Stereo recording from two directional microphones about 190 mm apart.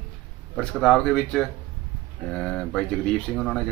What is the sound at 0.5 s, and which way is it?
Speech, centre (ahead or behind).